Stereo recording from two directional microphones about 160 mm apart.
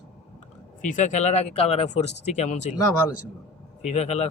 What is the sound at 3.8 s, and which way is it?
Speech, 45° left (ahead or behind).